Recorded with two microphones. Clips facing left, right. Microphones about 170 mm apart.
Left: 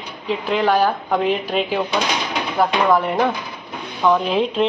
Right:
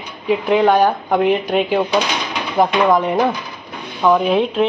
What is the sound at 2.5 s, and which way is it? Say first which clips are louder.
A woman's voice: right 3 dB; 15° right (ahead or behind).